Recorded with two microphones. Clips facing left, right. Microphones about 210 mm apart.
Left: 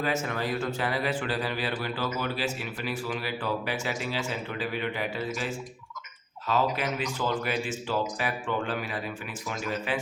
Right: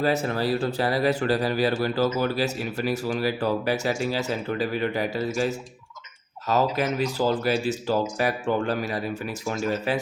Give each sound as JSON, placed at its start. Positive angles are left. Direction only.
{"t": 0.0, "sound": "speech", "side_deg": -35}